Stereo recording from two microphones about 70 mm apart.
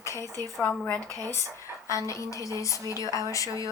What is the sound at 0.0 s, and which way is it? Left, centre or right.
Speech, left.